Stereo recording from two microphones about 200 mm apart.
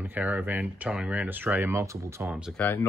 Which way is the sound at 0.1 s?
10° right (ahead or behind).